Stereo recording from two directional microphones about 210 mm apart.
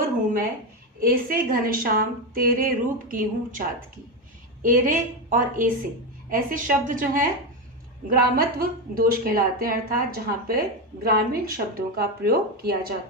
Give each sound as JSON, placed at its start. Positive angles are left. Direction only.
{"t": 0.9, "sound": "a woman's voice", "side_deg": -40}
{"t": 4.6, "sound": "a woman's voice", "side_deg": -40}